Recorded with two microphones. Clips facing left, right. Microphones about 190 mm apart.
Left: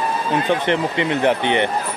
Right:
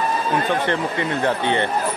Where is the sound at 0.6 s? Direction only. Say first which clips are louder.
Left 3 dB; 20° left (ahead or behind).